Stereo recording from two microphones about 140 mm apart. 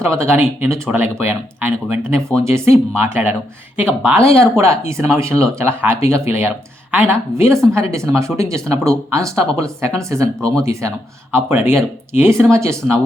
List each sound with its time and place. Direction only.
0.2 s speech: 15° right (ahead or behind)
2.0 s speech: 5° left (ahead or behind)
2.4 s speech: 15° right (ahead or behind)